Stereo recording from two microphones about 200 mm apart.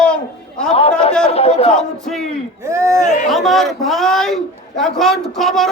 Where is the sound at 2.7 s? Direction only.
15° right (ahead or behind).